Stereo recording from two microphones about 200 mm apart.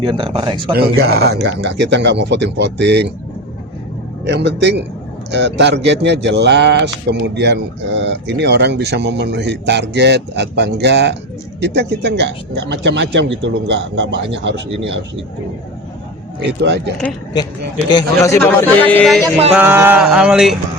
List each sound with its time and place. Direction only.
0.0 s speech: 25° right (ahead or behind)
0.7 s speech: 50° right (ahead or behind)
4.3 s speech: 60° right (ahead or behind)
16.5 s speech: 60° right (ahead or behind)
17.9 s a man's voice: 15° left (ahead or behind)
19.5 s a sound: 10° right (ahead or behind)